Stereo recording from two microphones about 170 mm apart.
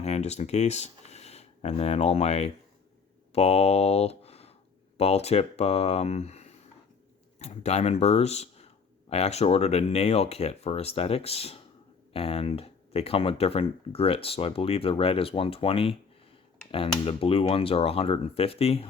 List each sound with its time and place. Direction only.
0.0 s speech: 40° left (ahead or behind)